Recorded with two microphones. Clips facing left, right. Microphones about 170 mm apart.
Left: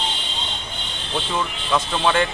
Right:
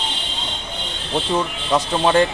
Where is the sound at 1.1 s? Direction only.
35° right (ahead or behind).